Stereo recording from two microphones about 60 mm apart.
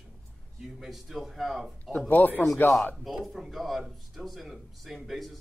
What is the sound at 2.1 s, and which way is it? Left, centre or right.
Speech, left.